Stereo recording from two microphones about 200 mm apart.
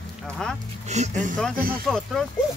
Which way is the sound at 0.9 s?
35° right (ahead or behind).